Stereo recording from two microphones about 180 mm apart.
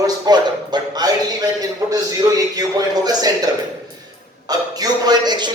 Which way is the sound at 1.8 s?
20° right (ahead or behind).